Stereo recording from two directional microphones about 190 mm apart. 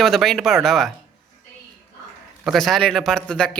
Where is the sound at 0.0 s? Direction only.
Centre (ahead or behind).